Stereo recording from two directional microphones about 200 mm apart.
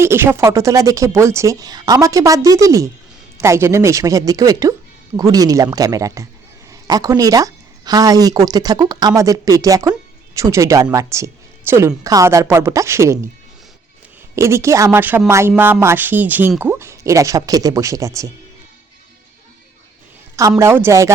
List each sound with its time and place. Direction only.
0.0 s speech: 10° right (ahead or behind)
14.3 s speech: 15° right (ahead or behind)
20.6 s speech: 10° right (ahead or behind)